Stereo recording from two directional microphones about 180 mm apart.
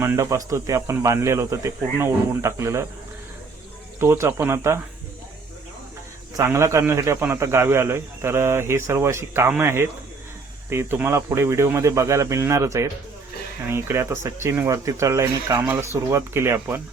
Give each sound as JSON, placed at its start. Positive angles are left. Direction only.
{"t": 0.0, "sound": "a man's voice", "side_deg": -15}
{"t": 4.0, "sound": "a man's voice", "side_deg": -15}
{"t": 6.3, "sound": "a man's voice", "side_deg": -15}